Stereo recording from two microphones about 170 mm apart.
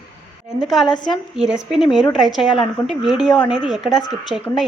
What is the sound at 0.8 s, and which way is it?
Speech, 25° left (ahead or behind).